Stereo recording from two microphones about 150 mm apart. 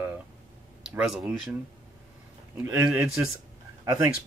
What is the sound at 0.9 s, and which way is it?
Speech, 5° right (ahead or behind).